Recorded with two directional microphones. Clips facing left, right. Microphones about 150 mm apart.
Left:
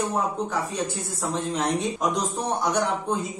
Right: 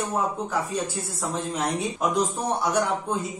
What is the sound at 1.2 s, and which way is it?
Speech, centre (ahead or behind).